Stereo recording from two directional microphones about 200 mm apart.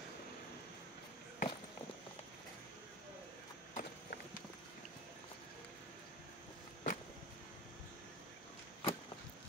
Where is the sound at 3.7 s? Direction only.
50° left (ahead or behind).